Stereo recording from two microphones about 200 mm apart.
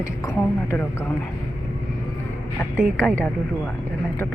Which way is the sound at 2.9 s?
10° left (ahead or behind).